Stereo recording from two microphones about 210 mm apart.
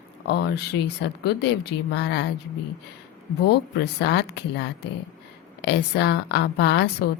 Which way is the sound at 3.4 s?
50° left (ahead or behind).